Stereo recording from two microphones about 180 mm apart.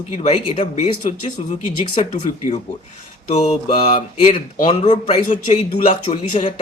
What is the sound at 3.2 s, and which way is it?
Speech, 40° left (ahead or behind).